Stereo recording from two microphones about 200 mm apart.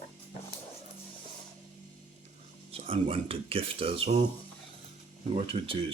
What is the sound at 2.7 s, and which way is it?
Speech, 30° right (ahead or behind).